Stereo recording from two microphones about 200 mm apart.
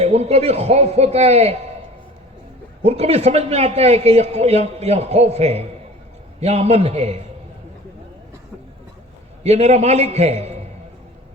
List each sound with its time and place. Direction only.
0.0 s a man's voice: 30° right (ahead or behind)
2.8 s a man's voice: 30° right (ahead or behind)
9.4 s a man's voice: 30° right (ahead or behind)